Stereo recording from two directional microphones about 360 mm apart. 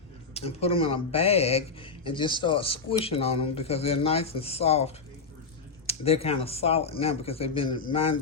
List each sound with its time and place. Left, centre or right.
0.3 s a man's voice: centre